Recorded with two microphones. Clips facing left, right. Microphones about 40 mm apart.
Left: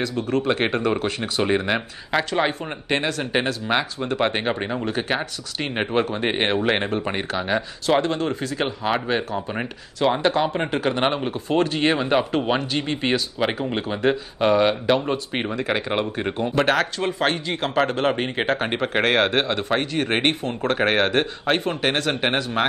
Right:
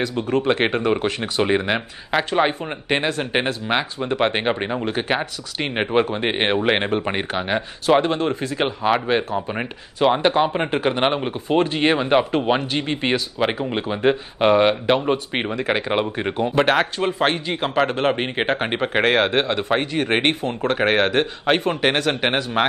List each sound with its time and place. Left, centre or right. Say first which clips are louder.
0.0 s speech: right 2 dB; right
0.5 s speech: right 3 dB; right
2.9 s speech: right 2 dB; right
5.8 s speech: right 3 dB; centre
6.0 s speech: right 1 dB; right
6.3 s speech: right 2 dB; centre
6.8 s speech: right 2 dB; right
11.3 s speech: right 2 dB; right
15.5 s speech: right 2 dB; right
15.9 s speech: right 2 dB; centre
18.9 s speech: right 2 dB; centre; by 20.7 s right
20.7 s speech: right 1 dB; centre
21.5 s speech: right 3 dB; right